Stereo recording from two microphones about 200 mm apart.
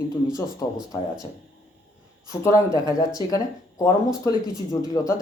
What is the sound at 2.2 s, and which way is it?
Speech, 15° left (ahead or behind).